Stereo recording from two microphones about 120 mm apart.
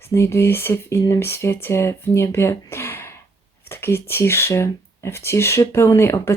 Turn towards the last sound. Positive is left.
turn(degrees=20)  # may be behind; listen again after turning